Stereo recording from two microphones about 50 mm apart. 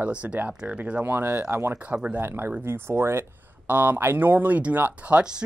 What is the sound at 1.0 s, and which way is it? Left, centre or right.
Speech, right.